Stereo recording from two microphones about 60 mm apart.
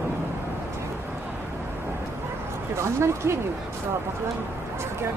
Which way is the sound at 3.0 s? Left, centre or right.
Right.